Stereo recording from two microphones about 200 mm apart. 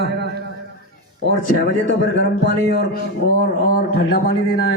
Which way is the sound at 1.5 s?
60° left (ahead or behind).